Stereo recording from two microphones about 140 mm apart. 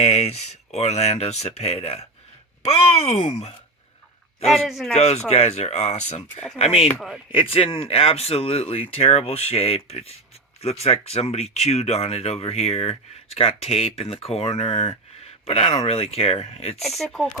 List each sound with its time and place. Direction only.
0.0 s speech: 50° left (ahead or behind)
4.4 s speech: centre (ahead or behind)
4.9 s speech: 50° left (ahead or behind)
16.8 s speech: centre (ahead or behind)